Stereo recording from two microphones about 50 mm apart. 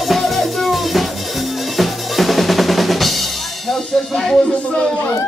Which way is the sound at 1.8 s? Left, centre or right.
Centre.